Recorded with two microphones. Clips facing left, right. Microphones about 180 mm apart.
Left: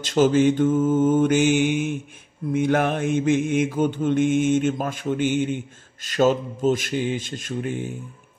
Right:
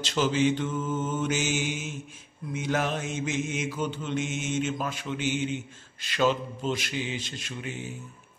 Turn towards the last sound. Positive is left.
turn(degrees=50)  # may be behind; listen again after turning